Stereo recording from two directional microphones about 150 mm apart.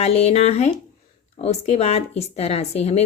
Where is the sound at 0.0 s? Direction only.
45° left (ahead or behind).